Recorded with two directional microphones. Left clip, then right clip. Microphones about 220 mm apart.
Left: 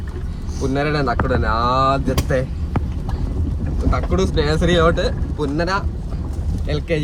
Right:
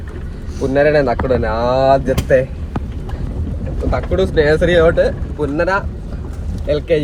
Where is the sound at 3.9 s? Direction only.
Centre (ahead or behind).